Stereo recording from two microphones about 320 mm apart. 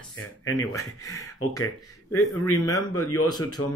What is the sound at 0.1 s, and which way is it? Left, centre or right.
Speech, left.